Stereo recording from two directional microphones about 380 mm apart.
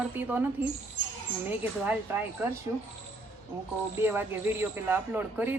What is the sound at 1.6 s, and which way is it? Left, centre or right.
Speech, centre.